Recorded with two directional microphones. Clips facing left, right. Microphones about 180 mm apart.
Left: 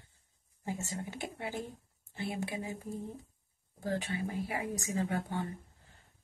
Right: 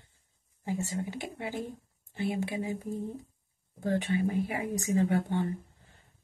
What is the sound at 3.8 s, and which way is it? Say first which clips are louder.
Speech: right 6 dB; 20° right (ahead or behind).